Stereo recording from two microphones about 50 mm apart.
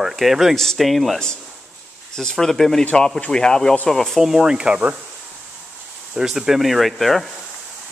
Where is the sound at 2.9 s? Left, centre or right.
Left; by 4.2 s centre.